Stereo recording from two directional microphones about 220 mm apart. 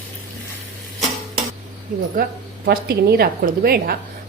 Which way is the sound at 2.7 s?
45° right (ahead or behind).